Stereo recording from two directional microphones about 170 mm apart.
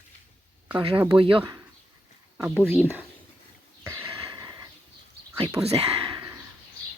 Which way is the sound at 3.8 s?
15° right (ahead or behind).